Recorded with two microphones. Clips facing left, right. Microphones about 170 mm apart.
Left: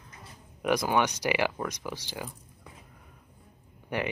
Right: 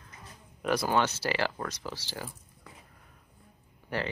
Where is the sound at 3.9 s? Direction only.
15° left (ahead or behind).